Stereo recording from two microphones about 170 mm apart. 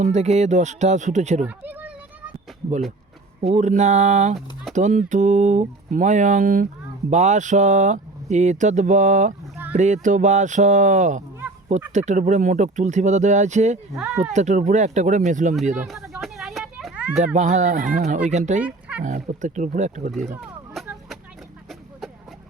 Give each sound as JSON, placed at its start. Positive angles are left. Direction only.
{"t": 0.0, "sound": "speech", "side_deg": -40}
{"t": 1.5, "sound": "speech", "side_deg": -10}
{"t": 3.4, "sound": "speech", "side_deg": -45}
{"t": 11.4, "sound": "honk", "side_deg": -10}
{"t": 11.9, "sound": "speech", "side_deg": -45}
{"t": 15.9, "sound": "a sound", "side_deg": 0}
{"t": 17.3, "sound": "speech", "side_deg": -45}
{"t": 18.6, "sound": "fowl", "side_deg": -10}
{"t": 19.0, "sound": "speech", "side_deg": -45}
{"t": 20.1, "sound": "speech", "side_deg": 0}
{"t": 20.3, "sound": "a sound", "side_deg": 0}